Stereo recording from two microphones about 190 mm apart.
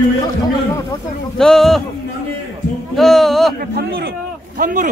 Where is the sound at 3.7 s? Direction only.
55° right (ahead or behind).